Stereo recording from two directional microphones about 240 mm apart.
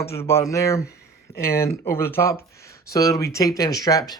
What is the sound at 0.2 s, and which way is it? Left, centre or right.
Speech, centre.